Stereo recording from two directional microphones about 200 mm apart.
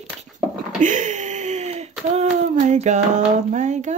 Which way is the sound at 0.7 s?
40° right (ahead or behind).